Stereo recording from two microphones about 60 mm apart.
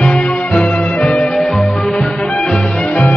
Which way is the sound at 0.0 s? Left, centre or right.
Centre.